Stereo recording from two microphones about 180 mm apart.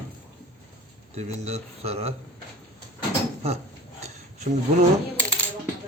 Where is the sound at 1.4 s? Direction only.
35° right (ahead or behind).